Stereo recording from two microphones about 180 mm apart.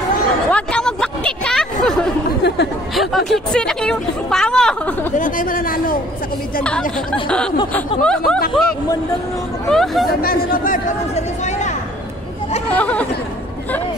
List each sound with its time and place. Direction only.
0.5 s a sound: 5° left (ahead or behind)
2.4 s chatter: 70° left (ahead or behind)
2.9 s speech: centre (ahead or behind)
5.1 s speech: 45° left (ahead or behind)
6.6 s speech: 5° left (ahead or behind)
10.2 s speech: 55° left (ahead or behind)
12.6 s speech: 5° left (ahead or behind)